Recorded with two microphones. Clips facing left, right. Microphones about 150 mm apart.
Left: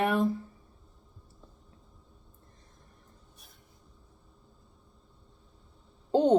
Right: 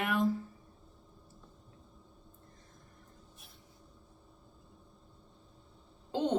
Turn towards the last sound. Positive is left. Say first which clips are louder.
# left 9 dB
turn(degrees=35)  # may be behind; listen again after turning